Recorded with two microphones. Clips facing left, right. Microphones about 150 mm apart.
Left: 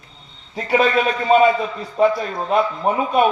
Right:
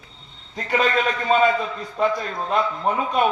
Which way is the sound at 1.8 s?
25° left (ahead or behind).